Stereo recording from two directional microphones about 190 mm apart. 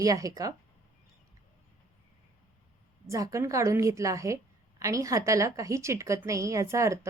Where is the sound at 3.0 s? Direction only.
15° right (ahead or behind).